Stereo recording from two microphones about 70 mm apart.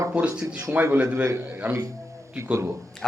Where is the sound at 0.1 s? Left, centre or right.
Centre.